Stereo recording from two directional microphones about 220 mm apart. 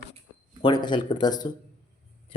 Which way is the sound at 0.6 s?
20° left (ahead or behind).